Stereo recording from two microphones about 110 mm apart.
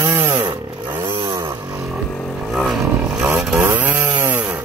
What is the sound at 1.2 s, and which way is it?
Vehicle, 35° right (ahead or behind).